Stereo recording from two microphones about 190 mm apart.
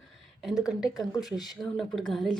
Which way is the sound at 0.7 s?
5° right (ahead or behind).